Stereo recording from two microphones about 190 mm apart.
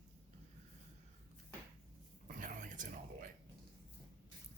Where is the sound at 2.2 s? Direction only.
45° right (ahead or behind).